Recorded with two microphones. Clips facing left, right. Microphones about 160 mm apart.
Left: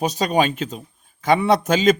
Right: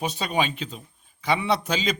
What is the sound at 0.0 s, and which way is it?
A man's voice, 40° left (ahead or behind).